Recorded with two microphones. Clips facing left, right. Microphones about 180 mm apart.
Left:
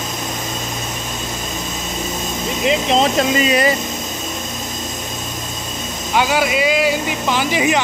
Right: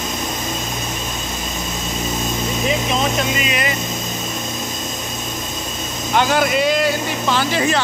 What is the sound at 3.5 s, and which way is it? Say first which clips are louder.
Speech: left 7 dB; 35° left (ahead or behind).